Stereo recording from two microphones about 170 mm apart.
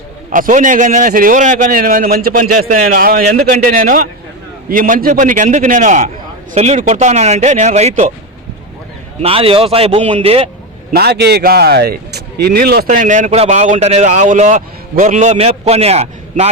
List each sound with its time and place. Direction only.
0.3 s a man's voice: 50° right (ahead or behind)
9.2 s speech: 35° right (ahead or behind)
10.9 s a man's voice: 70° right (ahead or behind); by 16.5 s 40° right (ahead or behind)